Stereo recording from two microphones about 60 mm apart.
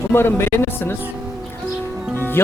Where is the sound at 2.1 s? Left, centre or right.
Left.